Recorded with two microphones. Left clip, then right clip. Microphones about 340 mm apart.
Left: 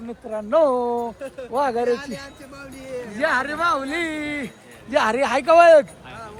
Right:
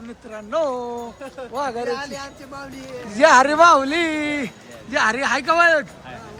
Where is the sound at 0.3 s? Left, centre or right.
Left.